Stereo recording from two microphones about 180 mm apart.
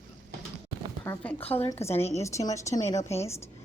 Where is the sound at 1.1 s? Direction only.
15° left (ahead or behind).